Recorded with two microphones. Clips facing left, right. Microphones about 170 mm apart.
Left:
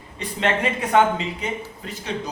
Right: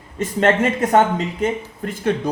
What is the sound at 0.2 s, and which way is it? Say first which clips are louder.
Speech: right 6 dB; 45° right (ahead or behind).